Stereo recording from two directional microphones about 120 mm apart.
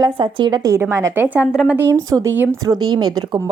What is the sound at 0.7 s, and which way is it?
Speech, 25° right (ahead or behind).